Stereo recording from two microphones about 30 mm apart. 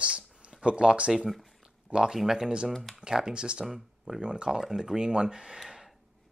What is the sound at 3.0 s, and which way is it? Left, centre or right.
Speech, right.